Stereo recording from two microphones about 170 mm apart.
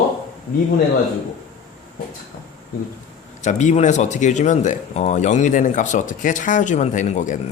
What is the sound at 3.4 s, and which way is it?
Speech, 45° left (ahead or behind).